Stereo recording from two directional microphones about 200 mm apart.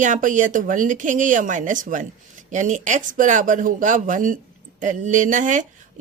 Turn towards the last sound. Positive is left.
turn(degrees=-40)  # may be behind; listen again after turning